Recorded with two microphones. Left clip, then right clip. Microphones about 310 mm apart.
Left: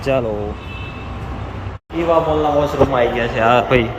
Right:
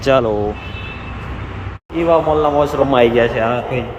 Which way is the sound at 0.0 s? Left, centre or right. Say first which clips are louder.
Right 5 dB; centre.